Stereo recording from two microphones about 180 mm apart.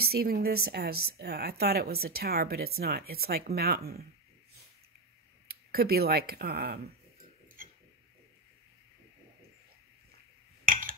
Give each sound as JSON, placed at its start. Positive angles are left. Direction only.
{"t": 0.0, "sound": "a woman's voice", "side_deg": -60}
{"t": 5.5, "sound": "speech", "side_deg": -60}
{"t": 10.7, "sound": "a sound", "side_deg": -50}